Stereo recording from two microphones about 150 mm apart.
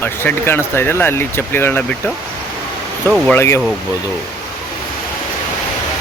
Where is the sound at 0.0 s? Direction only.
15° left (ahead or behind).